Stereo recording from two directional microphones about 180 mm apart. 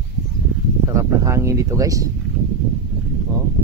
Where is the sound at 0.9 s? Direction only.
15° right (ahead or behind).